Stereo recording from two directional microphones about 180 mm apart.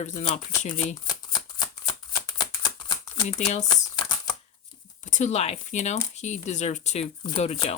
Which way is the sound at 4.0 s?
25° left (ahead or behind).